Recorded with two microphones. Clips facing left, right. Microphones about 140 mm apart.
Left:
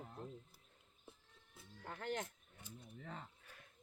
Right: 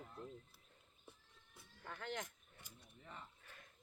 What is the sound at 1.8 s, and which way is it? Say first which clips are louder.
Speech: left 4 dB; 40° left (ahead or behind).